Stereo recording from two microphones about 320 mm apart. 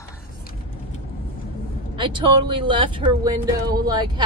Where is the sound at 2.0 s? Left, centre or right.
Centre.